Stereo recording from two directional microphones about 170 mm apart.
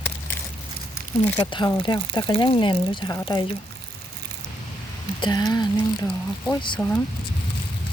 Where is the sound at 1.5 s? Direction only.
30° left (ahead or behind).